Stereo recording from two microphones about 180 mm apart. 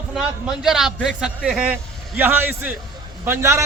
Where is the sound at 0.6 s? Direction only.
Centre (ahead or behind).